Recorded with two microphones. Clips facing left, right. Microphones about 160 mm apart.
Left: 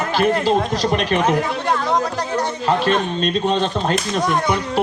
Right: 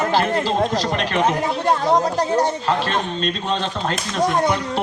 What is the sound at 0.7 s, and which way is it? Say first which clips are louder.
Speech: left 3 dB; 15° left (ahead or behind).